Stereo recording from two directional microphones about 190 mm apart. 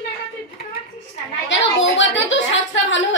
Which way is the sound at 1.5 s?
75° left (ahead or behind).